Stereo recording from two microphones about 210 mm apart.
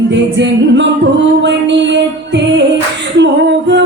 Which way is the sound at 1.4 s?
55° right (ahead or behind).